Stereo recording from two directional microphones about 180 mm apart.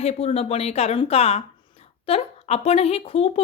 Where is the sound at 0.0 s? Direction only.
35° left (ahead or behind).